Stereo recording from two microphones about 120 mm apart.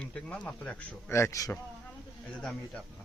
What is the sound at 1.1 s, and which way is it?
Speech, 25° left (ahead or behind).